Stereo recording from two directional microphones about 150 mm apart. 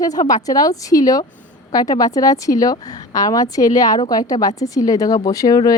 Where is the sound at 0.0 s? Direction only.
25° left (ahead or behind).